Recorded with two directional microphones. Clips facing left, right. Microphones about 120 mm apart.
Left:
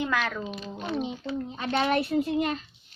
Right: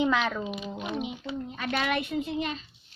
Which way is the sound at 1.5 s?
25° left (ahead or behind).